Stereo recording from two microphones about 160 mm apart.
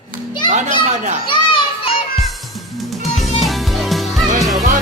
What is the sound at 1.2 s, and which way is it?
Children playing, 30° left (ahead or behind).